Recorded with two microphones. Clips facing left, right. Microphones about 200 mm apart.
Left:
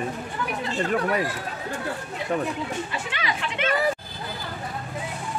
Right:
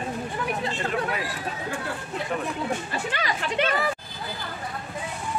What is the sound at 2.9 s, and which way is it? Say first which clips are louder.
Speech: right 1 dB; 40° right (ahead or behind).